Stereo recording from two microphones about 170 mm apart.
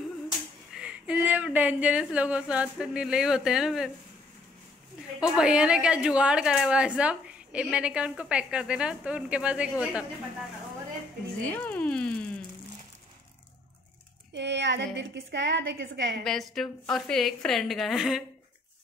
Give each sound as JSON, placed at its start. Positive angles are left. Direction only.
{"t": 0.7, "sound": "a woman's voice", "side_deg": -5}
{"t": 5.2, "sound": "a woman's voice", "side_deg": -5}
{"t": 11.4, "sound": "a sound", "side_deg": 10}
{"t": 14.3, "sound": "a woman's voice", "side_deg": -90}
{"t": 16.3, "sound": "a woman's voice", "side_deg": 0}